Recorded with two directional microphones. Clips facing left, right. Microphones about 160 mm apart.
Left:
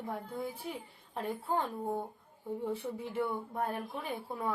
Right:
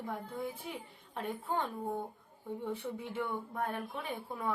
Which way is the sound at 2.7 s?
10° left (ahead or behind).